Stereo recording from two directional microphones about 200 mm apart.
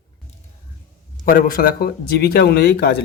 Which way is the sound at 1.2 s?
45° left (ahead or behind).